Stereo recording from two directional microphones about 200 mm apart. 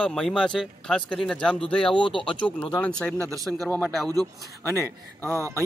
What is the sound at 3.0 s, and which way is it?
Speech, 5° left (ahead or behind).